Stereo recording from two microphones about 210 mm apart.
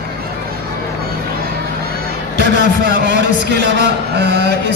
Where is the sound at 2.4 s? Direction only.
55° right (ahead or behind).